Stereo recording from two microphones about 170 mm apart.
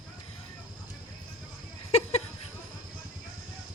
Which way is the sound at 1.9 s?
40° left (ahead or behind).